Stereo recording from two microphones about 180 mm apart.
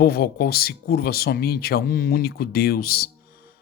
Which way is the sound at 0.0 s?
60° left (ahead or behind).